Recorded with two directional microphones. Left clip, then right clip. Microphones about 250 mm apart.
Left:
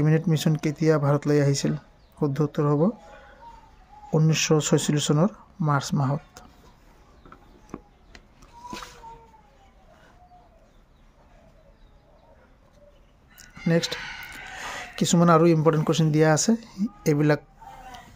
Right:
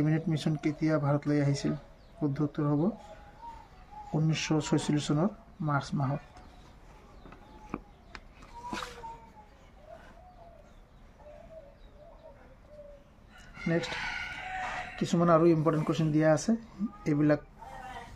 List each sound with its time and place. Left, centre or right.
0.0 s speech: left
4.1 s speech: left
13.7 s speech: left
15.0 s speech: left